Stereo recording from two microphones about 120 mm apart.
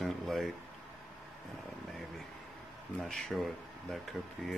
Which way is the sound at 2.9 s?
5° left (ahead or behind).